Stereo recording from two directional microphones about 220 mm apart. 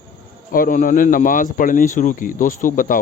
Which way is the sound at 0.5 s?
40° left (ahead or behind).